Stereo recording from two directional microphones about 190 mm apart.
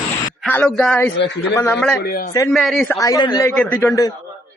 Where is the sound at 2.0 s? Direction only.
55° left (ahead or behind).